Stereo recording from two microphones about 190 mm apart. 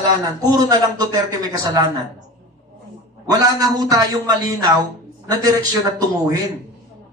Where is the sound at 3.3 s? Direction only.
20° right (ahead or behind).